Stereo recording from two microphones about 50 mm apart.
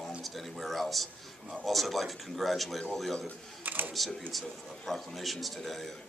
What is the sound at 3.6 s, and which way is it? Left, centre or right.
Speech, right.